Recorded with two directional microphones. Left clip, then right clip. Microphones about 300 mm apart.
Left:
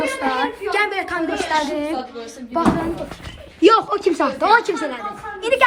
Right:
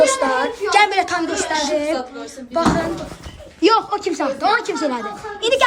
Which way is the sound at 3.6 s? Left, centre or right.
Centre.